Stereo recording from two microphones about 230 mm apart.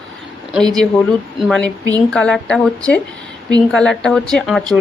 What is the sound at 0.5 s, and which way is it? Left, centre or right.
A woman's voice, centre.